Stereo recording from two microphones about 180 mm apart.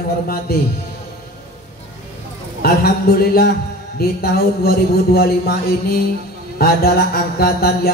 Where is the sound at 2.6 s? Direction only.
60° left (ahead or behind).